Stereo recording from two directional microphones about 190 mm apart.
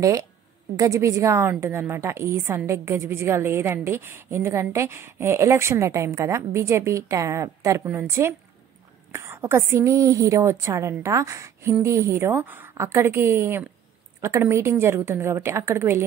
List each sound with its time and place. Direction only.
0.0 s a woman's voice: 15° right (ahead or behind)